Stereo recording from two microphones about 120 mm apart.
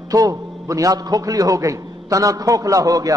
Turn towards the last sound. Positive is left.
turn(degrees=-30)  # may be behind; listen again after turning